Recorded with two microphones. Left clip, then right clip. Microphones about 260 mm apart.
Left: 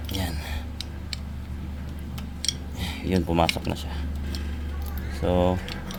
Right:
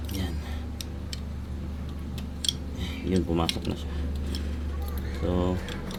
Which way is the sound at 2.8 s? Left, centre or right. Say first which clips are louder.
Left 2 dB; left.